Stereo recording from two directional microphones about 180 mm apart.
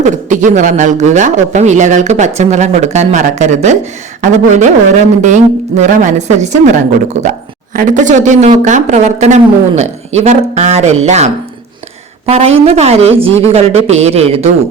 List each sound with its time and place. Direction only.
0.0 s a man's voice: 45° right (ahead or behind)
7.7 s a man's voice: 50° right (ahead or behind)